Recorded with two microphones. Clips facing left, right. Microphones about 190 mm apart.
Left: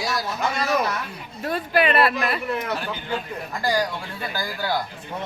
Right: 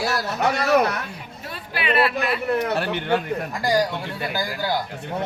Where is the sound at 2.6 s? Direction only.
70° right (ahead or behind).